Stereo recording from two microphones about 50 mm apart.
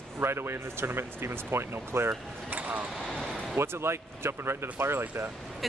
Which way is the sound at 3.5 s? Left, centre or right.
Right.